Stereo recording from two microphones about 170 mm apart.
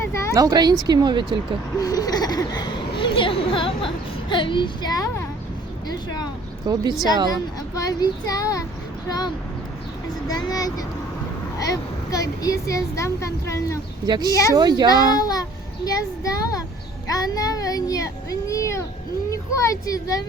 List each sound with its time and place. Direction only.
0.3 s speech: 20° right (ahead or behind)
1.7 s a sound: 20° left (ahead or behind)
6.7 s speech: 25° right (ahead or behind)
7.8 s speech: 20° left (ahead or behind)
14.1 s speech: 25° right (ahead or behind)
14.8 s a child's voice: 25° left (ahead or behind)